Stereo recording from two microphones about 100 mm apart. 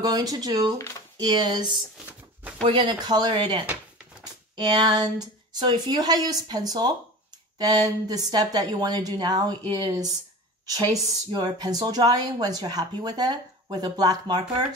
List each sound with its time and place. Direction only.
0.0 s a woman's voice: 40° right (ahead or behind)
0.7 s speech: 30° left (ahead or behind)
1.2 s speech: 45° right (ahead or behind)
2.8 s a woman's voice: 45° right (ahead or behind)